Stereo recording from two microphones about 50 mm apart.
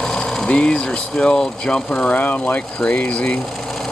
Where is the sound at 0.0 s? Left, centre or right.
Centre.